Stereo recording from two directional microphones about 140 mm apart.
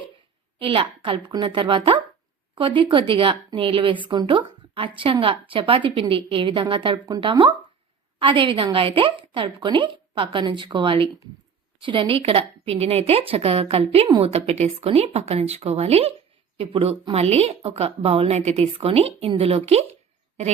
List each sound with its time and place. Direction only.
0.6 s a woman's voice: 35° right (ahead or behind)